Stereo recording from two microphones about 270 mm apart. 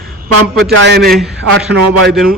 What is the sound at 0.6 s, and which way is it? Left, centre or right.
A man's voice, right.